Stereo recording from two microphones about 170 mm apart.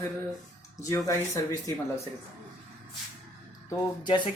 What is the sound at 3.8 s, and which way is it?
Speech, 25° left (ahead or behind).